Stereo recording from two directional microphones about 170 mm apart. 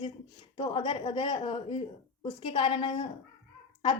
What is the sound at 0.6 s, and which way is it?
A woman's voice, 35° left (ahead or behind).